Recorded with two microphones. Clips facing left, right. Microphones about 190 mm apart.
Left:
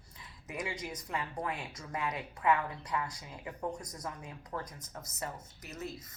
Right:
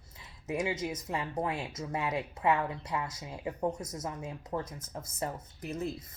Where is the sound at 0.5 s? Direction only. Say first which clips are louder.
Right 6 dB; 25° right (ahead or behind).